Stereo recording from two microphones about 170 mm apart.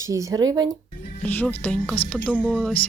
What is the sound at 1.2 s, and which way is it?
Speech, 10° left (ahead or behind).